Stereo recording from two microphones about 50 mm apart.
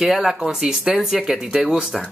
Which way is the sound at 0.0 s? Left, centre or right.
Centre.